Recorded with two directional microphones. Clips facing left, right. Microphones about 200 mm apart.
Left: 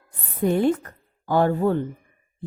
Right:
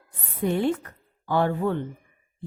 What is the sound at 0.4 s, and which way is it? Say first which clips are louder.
A woman's voice: left 4 dB; 45° left (ahead or behind).